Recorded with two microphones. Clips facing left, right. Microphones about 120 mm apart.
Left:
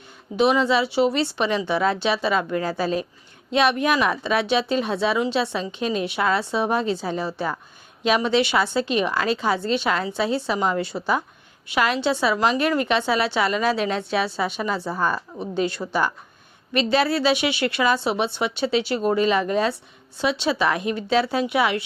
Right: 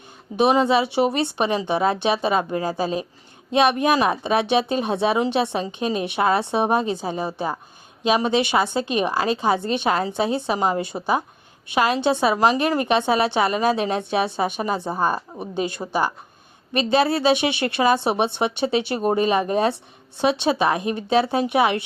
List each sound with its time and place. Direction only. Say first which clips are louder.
0.3 s speech: even; 20° left (ahead or behind)
0.7 s a woman's voice: right 1 dB; 20° right (ahead or behind)
10.9 s a woman's voice: even; 35° right (ahead or behind)
11.7 s a woman's voice: right 2 dB; 25° right (ahead or behind)
12.3 s a woman's voice: right 3 dB; 40° right (ahead or behind)
12.5 s a woman's voice: right 1 dB; 25° right (ahead or behind)
14.5 s a woman's voice: right 2 dB; 45° right (ahead or behind)
14.8 s a woman's voice: right 2 dB; 20° right (ahead or behind)